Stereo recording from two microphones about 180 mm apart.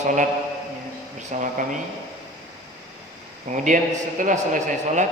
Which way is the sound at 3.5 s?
45° right (ahead or behind).